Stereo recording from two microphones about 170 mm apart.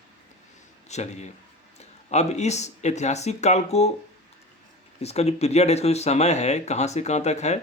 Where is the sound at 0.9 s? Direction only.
40° left (ahead or behind).